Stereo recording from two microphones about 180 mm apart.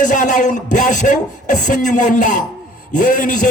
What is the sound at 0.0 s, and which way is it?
A man's voice, 45° left (ahead or behind).